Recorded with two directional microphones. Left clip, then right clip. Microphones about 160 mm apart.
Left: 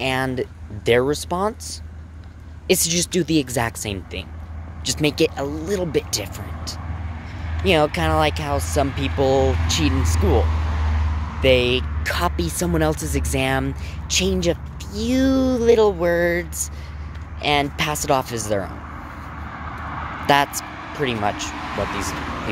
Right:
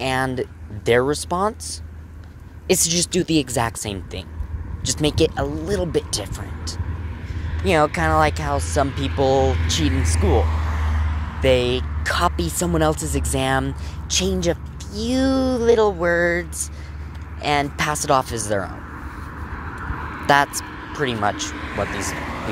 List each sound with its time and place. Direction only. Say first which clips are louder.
0.0 s speech: even; 5° left (ahead or behind)
9.4 s speech: even; 25° left (ahead or behind)
9.7 s vehicle: left 1 dB; 5° left (ahead or behind); by 11.4 s 25° right (ahead or behind)
11.4 s speech: left 1 dB; 5° left (ahead or behind)
20.4 s vehicle: even; 30° left (ahead or behind)
21.0 s speech: right 1 dB; 5° left (ahead or behind)
21.5 s speech: even; 20° left (ahead or behind)
21.9 s speech: even; centre (ahead or behind)